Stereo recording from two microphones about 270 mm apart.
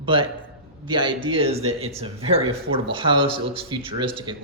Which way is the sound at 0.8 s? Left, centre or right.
Centre.